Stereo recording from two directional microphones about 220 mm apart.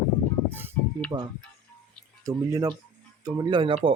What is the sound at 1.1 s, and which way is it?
Speech, 20° right (ahead or behind).